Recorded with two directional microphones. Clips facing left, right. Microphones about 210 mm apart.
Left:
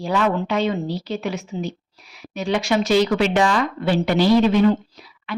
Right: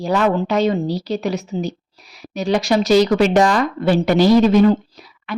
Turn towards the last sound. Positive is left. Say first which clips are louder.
# right 4 dB
turn(degrees=-40)  # may be behind; listen again after turning